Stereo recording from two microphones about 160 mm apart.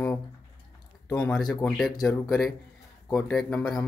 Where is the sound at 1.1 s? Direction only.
10° left (ahead or behind).